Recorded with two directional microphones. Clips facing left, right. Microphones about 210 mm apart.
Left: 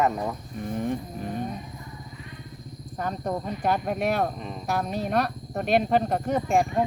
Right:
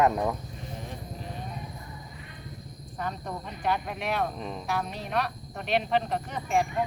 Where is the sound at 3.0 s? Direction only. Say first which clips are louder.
Left 6 dB; 45° left (ahead or behind).